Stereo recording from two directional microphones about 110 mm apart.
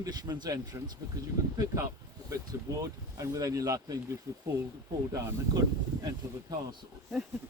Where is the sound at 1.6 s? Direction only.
30° right (ahead or behind).